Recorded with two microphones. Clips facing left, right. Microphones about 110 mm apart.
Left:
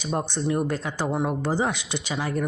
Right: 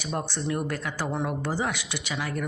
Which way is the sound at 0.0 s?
25° left (ahead or behind).